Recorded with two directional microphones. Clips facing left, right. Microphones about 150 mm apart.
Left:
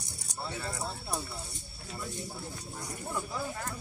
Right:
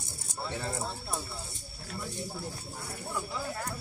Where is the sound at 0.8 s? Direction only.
Centre (ahead or behind).